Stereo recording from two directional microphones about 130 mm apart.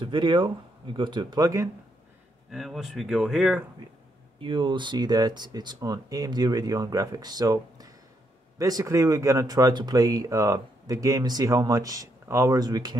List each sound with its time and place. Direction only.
0.0 s speech: 40° right (ahead or behind)
2.5 s speech: centre (ahead or behind)
4.4 s speech: 40° right (ahead or behind)